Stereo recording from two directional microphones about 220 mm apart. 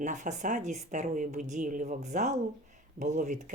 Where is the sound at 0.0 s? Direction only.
35° right (ahead or behind).